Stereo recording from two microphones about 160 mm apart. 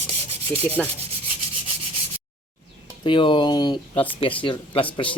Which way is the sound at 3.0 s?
30° left (ahead or behind).